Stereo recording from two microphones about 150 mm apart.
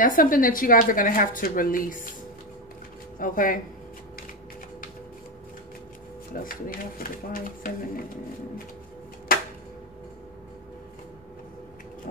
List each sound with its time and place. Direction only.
0.0 s speech: 65° left (ahead or behind)
3.2 s speech: 65° left (ahead or behind)
6.3 s speech: 70° left (ahead or behind)
9.3 s a sound: 75° left (ahead or behind)